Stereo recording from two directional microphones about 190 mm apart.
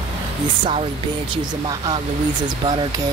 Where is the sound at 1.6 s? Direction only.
20° right (ahead or behind).